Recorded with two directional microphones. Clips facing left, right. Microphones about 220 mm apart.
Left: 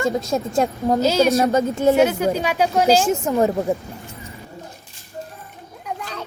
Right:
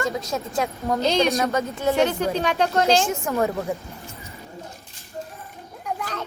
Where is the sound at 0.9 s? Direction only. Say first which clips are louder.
Left 3 dB; 5° left (ahead or behind).